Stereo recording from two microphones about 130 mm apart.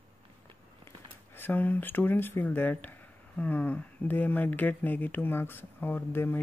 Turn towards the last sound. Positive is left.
turn(degrees=15)  # may be behind; listen again after turning